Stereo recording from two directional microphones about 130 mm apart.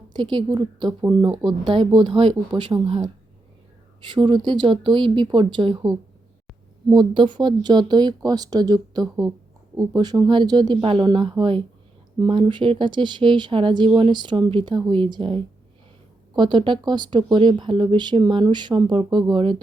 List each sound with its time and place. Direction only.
0.1 s a woman's voice: 35° right (ahead or behind)
4.1 s speech: 35° right (ahead or behind)